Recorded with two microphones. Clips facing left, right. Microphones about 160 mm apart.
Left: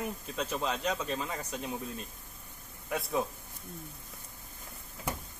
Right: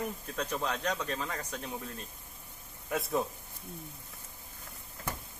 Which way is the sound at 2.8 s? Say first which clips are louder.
Even; centre (ahead or behind).